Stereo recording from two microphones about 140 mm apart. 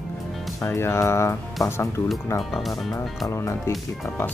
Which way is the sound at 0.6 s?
20° left (ahead or behind).